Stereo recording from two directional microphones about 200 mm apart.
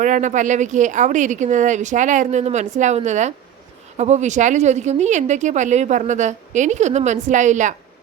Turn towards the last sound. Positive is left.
turn(degrees=-40)  # may be behind; listen again after turning